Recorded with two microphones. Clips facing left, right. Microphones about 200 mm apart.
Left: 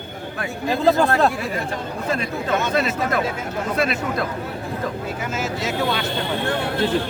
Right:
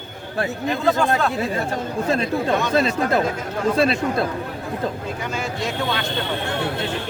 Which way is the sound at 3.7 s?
30° right (ahead or behind).